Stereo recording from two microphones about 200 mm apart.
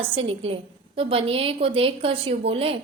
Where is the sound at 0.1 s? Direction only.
30° right (ahead or behind).